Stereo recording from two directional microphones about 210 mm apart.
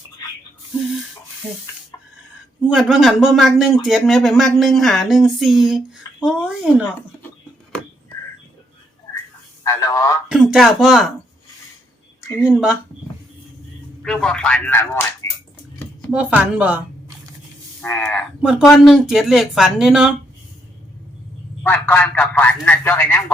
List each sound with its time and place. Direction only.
2.6 s speech: centre (ahead or behind)
9.6 s a man's voice: 15° left (ahead or behind)
10.2 s speech: centre (ahead or behind)
12.5 s speech: centre (ahead or behind)
14.0 s speech: 5° left (ahead or behind)
15.2 s a sound: 15° left (ahead or behind)
16.1 s speech: 5° right (ahead or behind)
17.8 s a man's voice: 10° left (ahead or behind)
18.4 s speech: centre (ahead or behind)
21.6 s a man's voice: 10° left (ahead or behind)